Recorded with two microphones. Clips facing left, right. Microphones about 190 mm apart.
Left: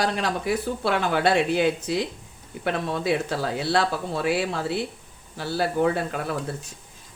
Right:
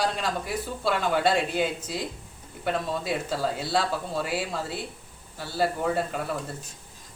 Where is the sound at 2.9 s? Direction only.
70° left (ahead or behind).